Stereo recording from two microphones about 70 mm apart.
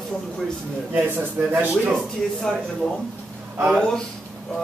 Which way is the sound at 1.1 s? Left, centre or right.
Right.